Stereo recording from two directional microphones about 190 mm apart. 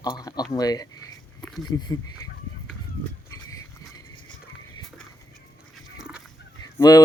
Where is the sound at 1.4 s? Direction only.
Centre (ahead or behind).